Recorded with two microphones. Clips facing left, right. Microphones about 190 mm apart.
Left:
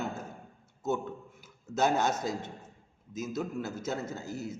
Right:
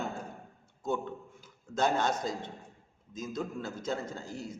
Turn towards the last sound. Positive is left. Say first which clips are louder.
# left 3 dB
turn(degrees=5)  # may be behind; listen again after turning